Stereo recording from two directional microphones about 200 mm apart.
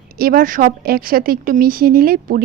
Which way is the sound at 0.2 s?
45° right (ahead or behind).